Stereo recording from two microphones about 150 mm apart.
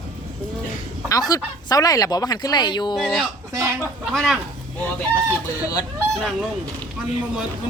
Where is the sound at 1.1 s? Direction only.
25° left (ahead or behind).